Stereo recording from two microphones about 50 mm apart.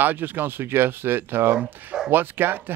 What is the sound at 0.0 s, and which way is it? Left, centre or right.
Speech, right.